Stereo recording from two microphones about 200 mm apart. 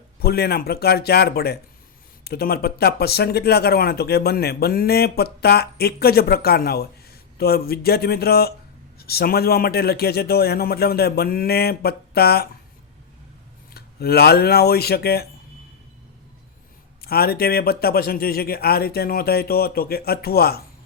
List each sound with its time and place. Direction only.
0.2 s speech: 50° left (ahead or behind)
13.7 s speech: 50° left (ahead or behind)
17.0 s speech: 50° left (ahead or behind)